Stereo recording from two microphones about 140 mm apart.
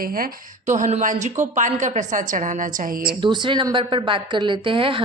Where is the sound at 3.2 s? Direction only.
35° right (ahead or behind).